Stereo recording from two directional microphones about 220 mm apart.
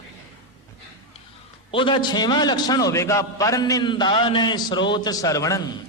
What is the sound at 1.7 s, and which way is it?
A man's voice, 20° left (ahead or behind).